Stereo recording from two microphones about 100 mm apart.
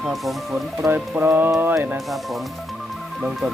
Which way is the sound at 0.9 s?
15° right (ahead or behind).